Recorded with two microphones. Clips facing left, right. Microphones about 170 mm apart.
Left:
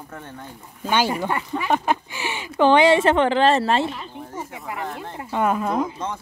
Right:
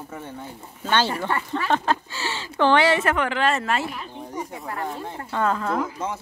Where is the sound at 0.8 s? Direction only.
10° left (ahead or behind); by 4.0 s 25° left (ahead or behind).